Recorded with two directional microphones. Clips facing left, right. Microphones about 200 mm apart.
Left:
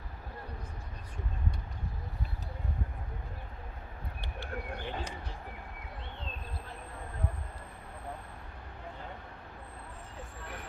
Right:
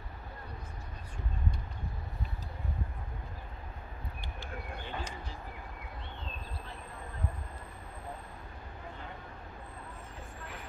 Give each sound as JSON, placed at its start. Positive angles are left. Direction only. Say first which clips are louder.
{"t": 4.2, "sound": "bird", "louder": "left 5 dB", "side_deg": 65}